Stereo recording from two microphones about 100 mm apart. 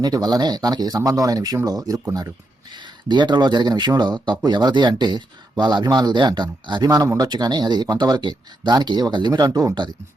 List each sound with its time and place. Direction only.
0.0 s speech: 40° right (ahead or behind)
2.7 s speech: 50° right (ahead or behind)